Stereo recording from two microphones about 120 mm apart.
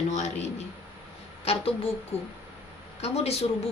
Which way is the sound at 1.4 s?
55° left (ahead or behind).